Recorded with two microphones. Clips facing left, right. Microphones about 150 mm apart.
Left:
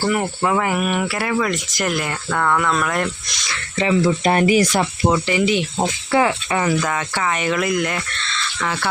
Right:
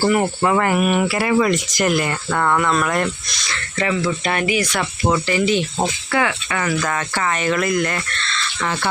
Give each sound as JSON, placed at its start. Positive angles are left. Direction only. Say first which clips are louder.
{"t": 0.0, "sound": "speech", "louder": "right 3 dB", "side_deg": -5}
{"t": 3.5, "sound": "speech", "louder": "left 1 dB", "side_deg": 20}
{"t": 4.0, "sound": "speech", "louder": "left 5 dB", "side_deg": 40}
{"t": 5.0, "sound": "speech", "louder": "right 1 dB", "side_deg": 10}
{"t": 6.1, "sound": "speech", "louder": "left 3 dB", "side_deg": 25}
{"t": 6.7, "sound": "speech", "louder": "even", "side_deg": 5}